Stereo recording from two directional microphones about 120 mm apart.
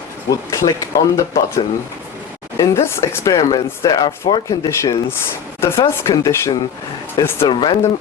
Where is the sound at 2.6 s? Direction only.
25° left (ahead or behind).